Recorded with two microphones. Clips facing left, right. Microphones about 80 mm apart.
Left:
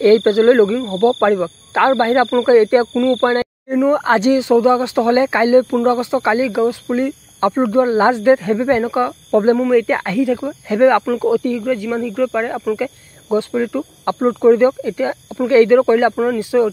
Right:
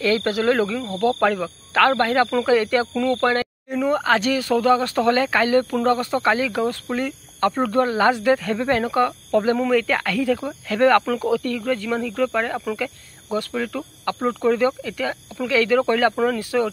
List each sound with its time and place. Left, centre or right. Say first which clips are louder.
0.0 s speech: left 10 dB; left
2.9 s speech: left 6 dB; centre
3.2 s speech: left 5 dB; left
15.8 s speech: left 5 dB; centre